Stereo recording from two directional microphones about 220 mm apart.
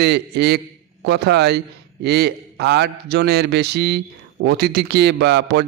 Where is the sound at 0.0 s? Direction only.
50° right (ahead or behind).